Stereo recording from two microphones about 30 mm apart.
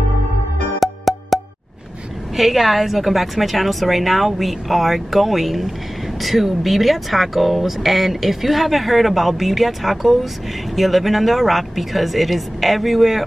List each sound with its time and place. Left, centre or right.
0.7 s music: centre
2.3 s speech: centre